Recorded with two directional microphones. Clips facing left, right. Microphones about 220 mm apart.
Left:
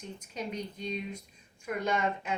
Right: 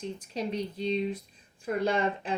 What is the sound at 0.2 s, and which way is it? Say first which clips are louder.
Speech: right 3 dB; 30° right (ahead or behind).